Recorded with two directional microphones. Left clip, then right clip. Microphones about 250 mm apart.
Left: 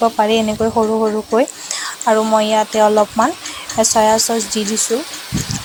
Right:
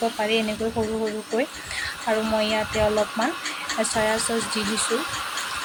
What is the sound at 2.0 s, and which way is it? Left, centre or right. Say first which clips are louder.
Speech: left 10 dB; centre.